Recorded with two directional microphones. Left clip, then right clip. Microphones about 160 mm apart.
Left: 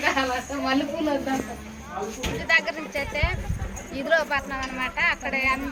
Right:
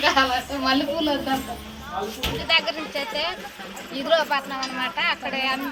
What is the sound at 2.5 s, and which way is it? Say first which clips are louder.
Speech: even; 10° left (ahead or behind).